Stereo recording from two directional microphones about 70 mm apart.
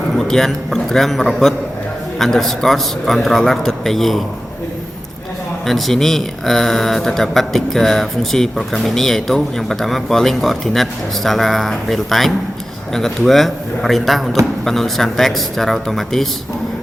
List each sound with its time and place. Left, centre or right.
0.2 s speech: centre
5.6 s speech: centre